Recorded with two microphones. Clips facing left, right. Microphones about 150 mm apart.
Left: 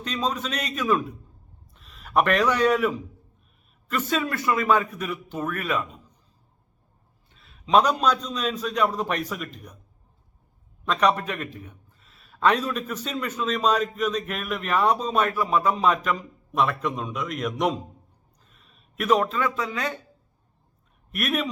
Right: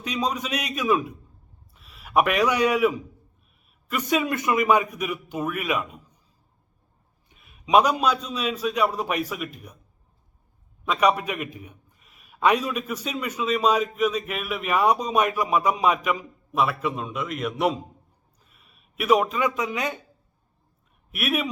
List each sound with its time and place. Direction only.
0.0 s a man's voice: 10° right (ahead or behind)
7.3 s a man's voice: 15° right (ahead or behind)
10.8 s a man's voice: 10° right (ahead or behind)
21.1 s a man's voice: 10° right (ahead or behind)